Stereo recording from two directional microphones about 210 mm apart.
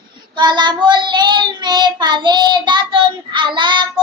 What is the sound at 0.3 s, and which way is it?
Child singing, 20° right (ahead or behind).